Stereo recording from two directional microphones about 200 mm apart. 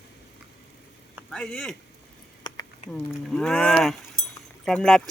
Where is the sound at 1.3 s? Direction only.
5° left (ahead or behind).